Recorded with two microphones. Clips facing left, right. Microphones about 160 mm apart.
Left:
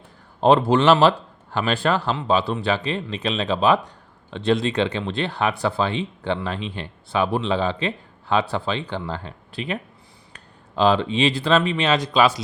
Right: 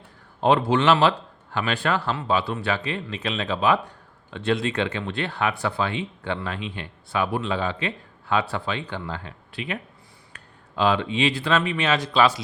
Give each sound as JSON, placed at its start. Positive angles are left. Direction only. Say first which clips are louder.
{"t": 0.4, "sound": "speech", "louder": "left 3 dB", "side_deg": 35}
{"t": 10.8, "sound": "speech", "louder": "left 3 dB", "side_deg": 35}